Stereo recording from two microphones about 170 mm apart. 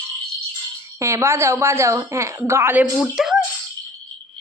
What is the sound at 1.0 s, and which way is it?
Speech, 15° right (ahead or behind).